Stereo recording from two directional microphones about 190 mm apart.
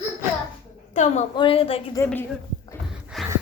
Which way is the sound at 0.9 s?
40° left (ahead or behind).